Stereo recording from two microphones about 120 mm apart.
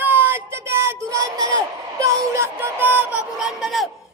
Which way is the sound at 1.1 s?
30° right (ahead or behind).